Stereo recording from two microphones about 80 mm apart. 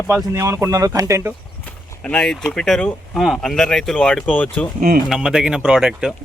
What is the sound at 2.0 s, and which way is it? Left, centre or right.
Speech, centre.